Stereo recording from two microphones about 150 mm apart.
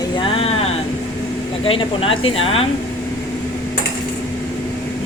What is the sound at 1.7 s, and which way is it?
A woman's voice, 35° left (ahead or behind).